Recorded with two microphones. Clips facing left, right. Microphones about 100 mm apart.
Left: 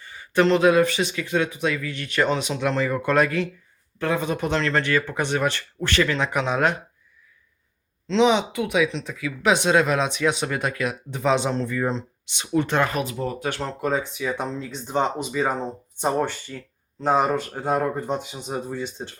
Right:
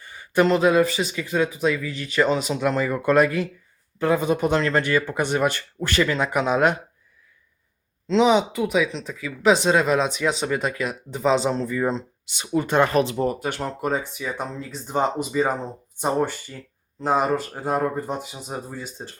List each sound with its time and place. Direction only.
0.3 s speech: 5° right (ahead or behind)
8.0 s speech: 5° right (ahead or behind)
12.9 s speech: 35° right (ahead or behind)
13.4 s speech: 5° right (ahead or behind)